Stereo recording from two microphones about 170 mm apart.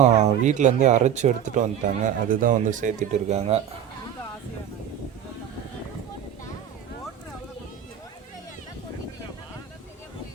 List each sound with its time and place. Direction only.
0.1 s speech: 45° right (ahead or behind)